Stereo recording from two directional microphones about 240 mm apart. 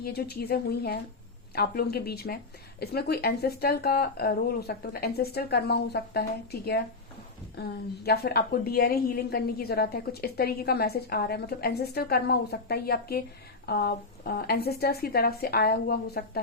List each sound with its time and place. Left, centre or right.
0.0 s a woman's voice: left